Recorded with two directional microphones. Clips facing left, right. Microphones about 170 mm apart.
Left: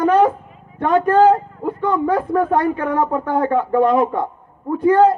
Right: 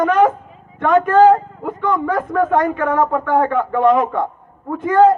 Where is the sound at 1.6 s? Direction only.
35° left (ahead or behind).